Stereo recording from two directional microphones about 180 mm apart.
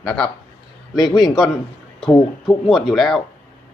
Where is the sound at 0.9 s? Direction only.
20° left (ahead or behind).